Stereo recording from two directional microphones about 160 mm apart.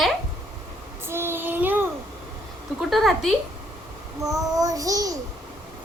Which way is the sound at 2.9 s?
Centre (ahead or behind).